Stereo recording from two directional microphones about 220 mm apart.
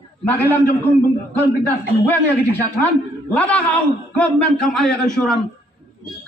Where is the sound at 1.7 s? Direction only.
10° left (ahead or behind).